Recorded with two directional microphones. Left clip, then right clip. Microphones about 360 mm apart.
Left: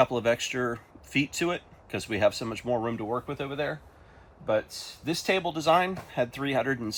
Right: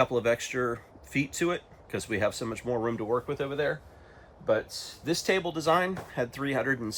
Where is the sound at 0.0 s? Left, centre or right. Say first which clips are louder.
Left 1 dB; centre.